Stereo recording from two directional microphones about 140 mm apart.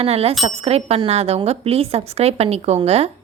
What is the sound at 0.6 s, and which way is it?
A woman's voice, 45° right (ahead or behind).